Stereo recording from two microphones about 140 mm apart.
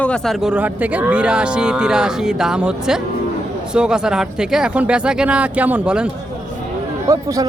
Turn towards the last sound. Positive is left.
turn(degrees=-25)  # may be behind; listen again after turning